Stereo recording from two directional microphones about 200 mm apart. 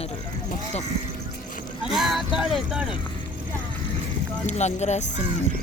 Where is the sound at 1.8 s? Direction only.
Centre (ahead or behind).